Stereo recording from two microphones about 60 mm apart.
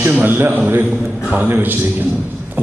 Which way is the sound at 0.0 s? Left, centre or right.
Right.